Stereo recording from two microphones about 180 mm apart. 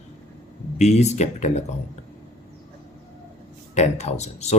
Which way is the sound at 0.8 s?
40° left (ahead or behind).